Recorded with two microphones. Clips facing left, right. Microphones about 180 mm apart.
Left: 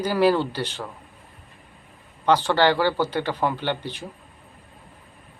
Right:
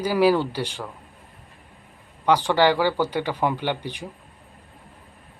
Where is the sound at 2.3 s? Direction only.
15° right (ahead or behind).